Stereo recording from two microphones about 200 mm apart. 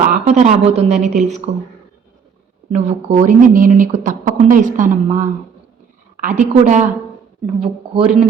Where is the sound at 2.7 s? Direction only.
35° right (ahead or behind).